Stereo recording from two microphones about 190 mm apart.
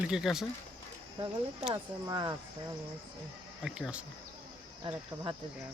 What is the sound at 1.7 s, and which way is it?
Speech, 25° right (ahead or behind).